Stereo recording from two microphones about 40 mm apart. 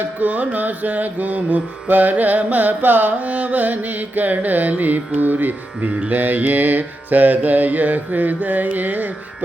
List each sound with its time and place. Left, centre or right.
0.2 s music: right
5.9 s mantra: right
6.1 s music: right